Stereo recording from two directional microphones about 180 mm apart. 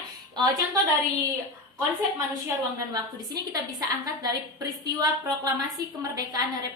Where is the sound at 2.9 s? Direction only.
20° right (ahead or behind).